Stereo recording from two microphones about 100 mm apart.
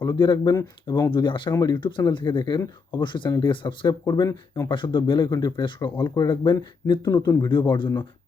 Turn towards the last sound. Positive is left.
turn(degrees=55)  # may be behind; listen again after turning